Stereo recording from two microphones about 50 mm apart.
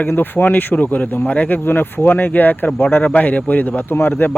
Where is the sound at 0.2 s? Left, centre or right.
Left.